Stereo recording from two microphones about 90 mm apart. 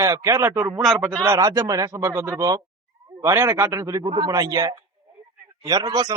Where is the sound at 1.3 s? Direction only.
40° right (ahead or behind).